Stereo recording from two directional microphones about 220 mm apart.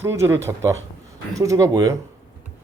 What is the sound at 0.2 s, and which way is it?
Speech, 10° right (ahead or behind).